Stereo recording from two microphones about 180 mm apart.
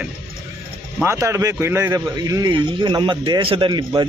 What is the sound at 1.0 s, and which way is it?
A man's voice, 15° right (ahead or behind).